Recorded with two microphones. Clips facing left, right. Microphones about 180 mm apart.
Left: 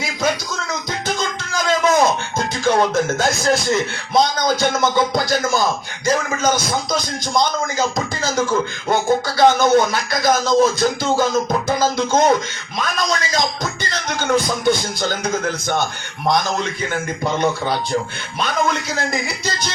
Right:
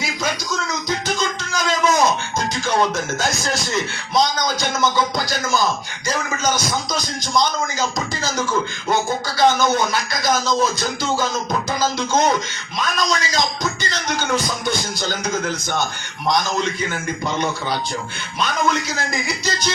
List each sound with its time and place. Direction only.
0.7 s music: 55° left (ahead or behind)
3.2 s speech: 55° left (ahead or behind)
11.7 s music: 55° left (ahead or behind)
12.8 s speech: 55° left (ahead or behind)
16.2 s music: 55° left (ahead or behind)
16.9 s speech: 55° left (ahead or behind)
18.7 s speech: 55° left (ahead or behind)